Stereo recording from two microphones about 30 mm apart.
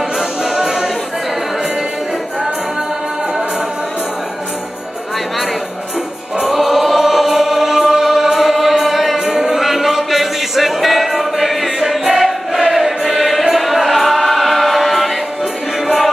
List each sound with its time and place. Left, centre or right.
0.2 s music: centre
6.4 s choir: centre
9.4 s music: centre
12.0 s choir: centre